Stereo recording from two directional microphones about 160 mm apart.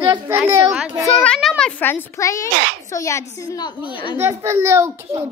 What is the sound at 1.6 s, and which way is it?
A child's voice, 10° left (ahead or behind).